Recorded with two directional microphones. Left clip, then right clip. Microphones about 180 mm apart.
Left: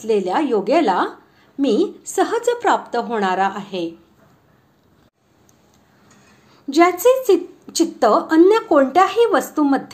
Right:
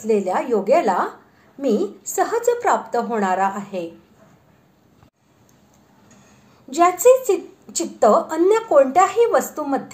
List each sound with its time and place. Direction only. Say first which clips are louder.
0.0 s a woman's voice: left 1 dB; 30° left (ahead or behind)
6.7 s a woman's voice: even; 30° left (ahead or behind)